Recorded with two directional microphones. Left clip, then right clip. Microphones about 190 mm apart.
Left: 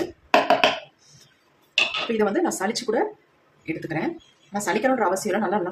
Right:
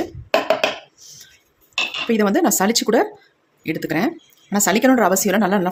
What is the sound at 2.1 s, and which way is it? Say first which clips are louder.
Speech: right 5 dB; 55° right (ahead or behind).